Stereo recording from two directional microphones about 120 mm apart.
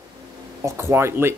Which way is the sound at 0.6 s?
20° right (ahead or behind).